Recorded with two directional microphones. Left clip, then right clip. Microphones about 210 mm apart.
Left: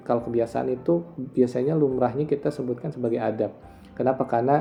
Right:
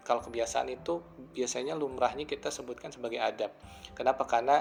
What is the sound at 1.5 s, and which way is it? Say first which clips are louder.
A man's voice: left 10 dB; 25° right (ahead or behind).